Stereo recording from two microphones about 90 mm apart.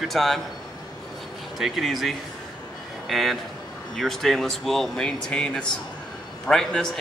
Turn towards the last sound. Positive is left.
turn(degrees=5)  # may be behind; listen again after turning